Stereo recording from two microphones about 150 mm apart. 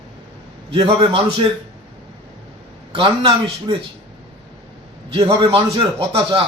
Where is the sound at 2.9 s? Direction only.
35° right (ahead or behind).